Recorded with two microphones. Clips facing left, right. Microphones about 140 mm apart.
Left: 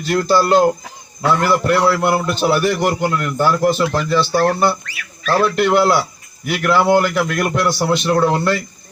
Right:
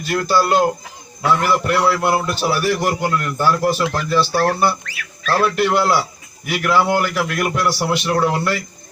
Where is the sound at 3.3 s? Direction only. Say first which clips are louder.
Left 3 dB; 15° left (ahead or behind).